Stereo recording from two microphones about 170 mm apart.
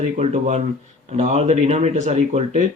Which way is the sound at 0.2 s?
45° right (ahead or behind).